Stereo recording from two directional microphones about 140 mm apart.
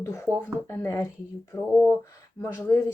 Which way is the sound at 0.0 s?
20° left (ahead or behind).